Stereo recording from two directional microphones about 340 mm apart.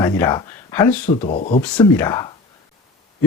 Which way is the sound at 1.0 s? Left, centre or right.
Left.